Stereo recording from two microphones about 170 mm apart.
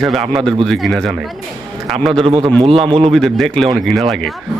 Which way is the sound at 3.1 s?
Centre (ahead or behind).